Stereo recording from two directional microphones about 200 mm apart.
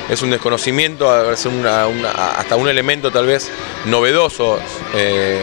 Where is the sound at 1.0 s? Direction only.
25° left (ahead or behind).